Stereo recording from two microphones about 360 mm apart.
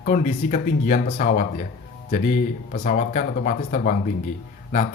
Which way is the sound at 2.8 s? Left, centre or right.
Left.